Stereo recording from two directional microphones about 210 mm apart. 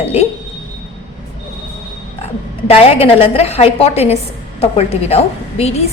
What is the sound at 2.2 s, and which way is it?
A woman's voice, 30° left (ahead or behind).